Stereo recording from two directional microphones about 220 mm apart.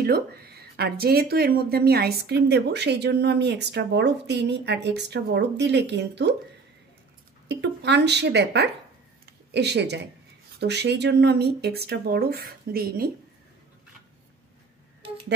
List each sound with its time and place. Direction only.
0.0 s speech: 45° right (ahead or behind)
7.4 s speech: 50° right (ahead or behind)
9.2 s a sound: 50° right (ahead or behind)
10.6 s speech: 50° right (ahead or behind)